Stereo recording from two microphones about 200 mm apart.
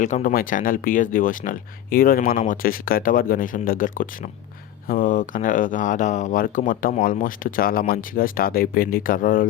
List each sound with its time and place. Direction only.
0.0 s speech: 40° left (ahead or behind)